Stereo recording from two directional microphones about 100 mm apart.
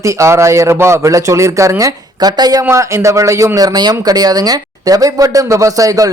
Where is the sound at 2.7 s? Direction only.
30° right (ahead or behind).